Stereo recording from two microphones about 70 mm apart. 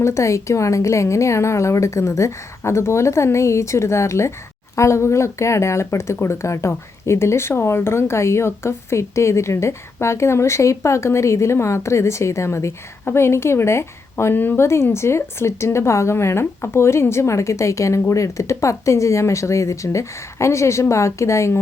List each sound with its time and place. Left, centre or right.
0.0 s speech: left